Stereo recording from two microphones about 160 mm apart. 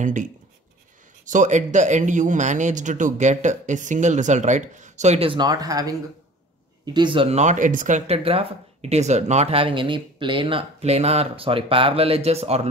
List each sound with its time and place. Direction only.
0.0 s speech: 50° right (ahead or behind)
8.2 s speech: 35° right (ahead or behind)